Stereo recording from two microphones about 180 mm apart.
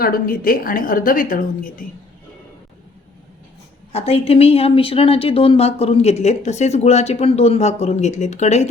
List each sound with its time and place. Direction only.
0.0 s a woman's voice: 55° left (ahead or behind)
3.9 s speech: 35° left (ahead or behind)